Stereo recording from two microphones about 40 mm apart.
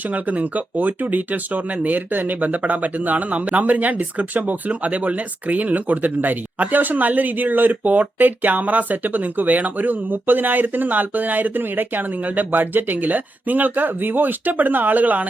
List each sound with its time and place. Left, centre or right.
0.1 s speech: right